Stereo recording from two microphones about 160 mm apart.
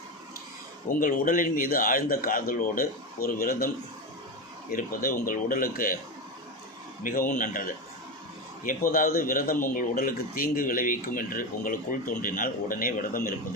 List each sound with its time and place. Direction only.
0.9 s a man's voice: 60° left (ahead or behind)
4.7 s a man's voice: 60° left (ahead or behind)
7.0 s a man's voice: 60° left (ahead or behind)